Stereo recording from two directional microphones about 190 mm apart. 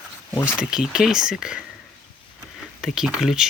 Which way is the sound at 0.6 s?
5° right (ahead or behind).